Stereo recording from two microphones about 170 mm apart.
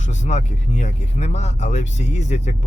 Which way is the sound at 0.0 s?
45° left (ahead or behind).